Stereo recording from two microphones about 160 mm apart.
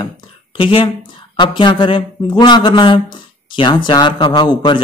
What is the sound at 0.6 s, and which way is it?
Speech, 35° left (ahead or behind).